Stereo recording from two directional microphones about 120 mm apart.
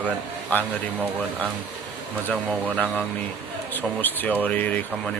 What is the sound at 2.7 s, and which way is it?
Speech, 15° left (ahead or behind).